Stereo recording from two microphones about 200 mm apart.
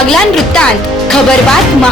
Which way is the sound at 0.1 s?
Centre (ahead or behind).